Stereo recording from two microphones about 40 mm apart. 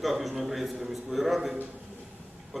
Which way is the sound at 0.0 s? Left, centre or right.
Centre.